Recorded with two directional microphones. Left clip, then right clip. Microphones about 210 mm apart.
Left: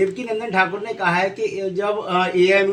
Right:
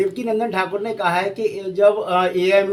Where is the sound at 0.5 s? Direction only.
65° right (ahead or behind).